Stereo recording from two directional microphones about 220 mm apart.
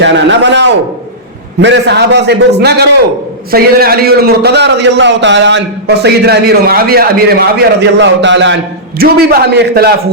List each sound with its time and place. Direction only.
0.0 s a man's voice: 55° right (ahead or behind)
7.8 s a man's voice: 55° right (ahead or behind)